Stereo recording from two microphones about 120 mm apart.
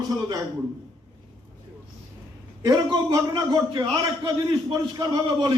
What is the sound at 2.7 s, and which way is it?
A man's voice, 35° right (ahead or behind).